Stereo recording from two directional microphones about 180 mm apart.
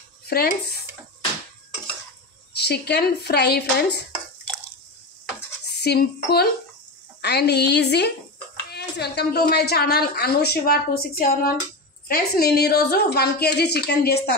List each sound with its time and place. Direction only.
0.3 s a woman's voice: 60° left (ahead or behind)
2.5 s a woman's voice: 65° left (ahead or behind)
5.7 s a woman's voice: 65° left (ahead or behind)